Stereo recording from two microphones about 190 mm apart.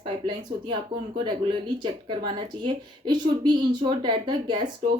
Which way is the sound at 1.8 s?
25° right (ahead or behind).